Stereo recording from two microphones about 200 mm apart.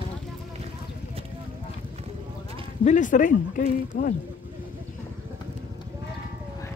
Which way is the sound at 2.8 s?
40° left (ahead or behind).